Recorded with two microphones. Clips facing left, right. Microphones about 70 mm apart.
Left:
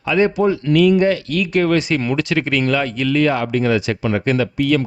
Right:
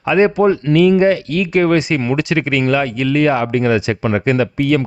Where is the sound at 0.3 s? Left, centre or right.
Right.